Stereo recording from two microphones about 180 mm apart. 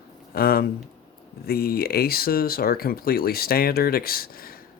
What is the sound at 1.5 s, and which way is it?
Speech, 55° left (ahead or behind).